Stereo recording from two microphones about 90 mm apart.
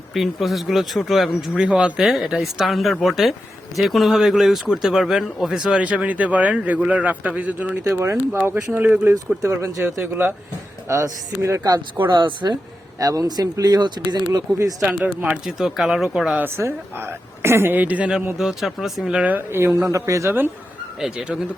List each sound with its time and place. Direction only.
0.1 s speech: centre (ahead or behind)
9.1 s speech: 35° right (ahead or behind)
11.9 s speech: 60° right (ahead or behind)
13.0 s speech: 45° right (ahead or behind)
14.8 s speech: centre (ahead or behind)
15.0 s speech: 15° right (ahead or behind)
15.4 s speech: 5° right (ahead or behind)
16.4 s speech: 30° right (ahead or behind)
18.3 s speech: 5° right (ahead or behind); by 20.3 s 35° right (ahead or behind)
21.0 s speech: 10° right (ahead or behind)